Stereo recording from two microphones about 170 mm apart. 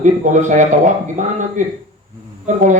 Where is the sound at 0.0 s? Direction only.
45° right (ahead or behind).